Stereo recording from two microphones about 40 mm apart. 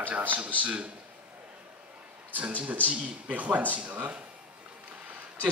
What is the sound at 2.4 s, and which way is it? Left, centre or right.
Speech, right.